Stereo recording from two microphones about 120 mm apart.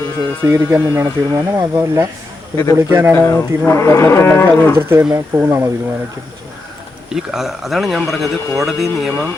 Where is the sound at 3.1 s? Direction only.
20° left (ahead or behind).